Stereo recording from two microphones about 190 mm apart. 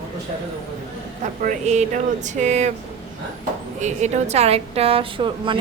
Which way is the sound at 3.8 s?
40° right (ahead or behind).